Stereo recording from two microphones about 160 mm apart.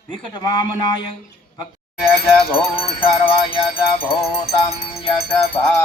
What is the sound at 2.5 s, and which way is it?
Music, 35° left (ahead or behind).